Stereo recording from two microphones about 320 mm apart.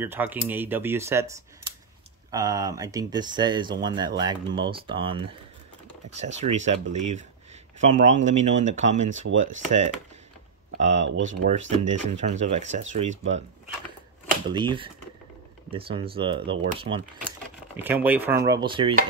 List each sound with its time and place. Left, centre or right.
0.0 s speech: centre
2.3 s speech: centre
14.5 s speech: centre
17.8 s speech: centre